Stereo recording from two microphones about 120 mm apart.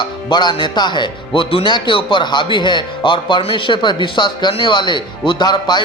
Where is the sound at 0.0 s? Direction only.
40° left (ahead or behind).